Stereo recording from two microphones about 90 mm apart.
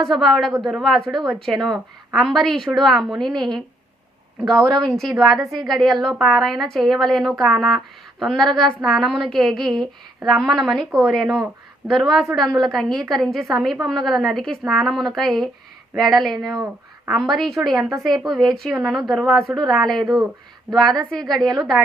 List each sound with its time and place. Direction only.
0.0 s a woman's voice: centre (ahead or behind)
17.3 s a woman's voice: centre (ahead or behind)
20.0 s speech: 50° right (ahead or behind)
20.7 s a woman's voice: centre (ahead or behind)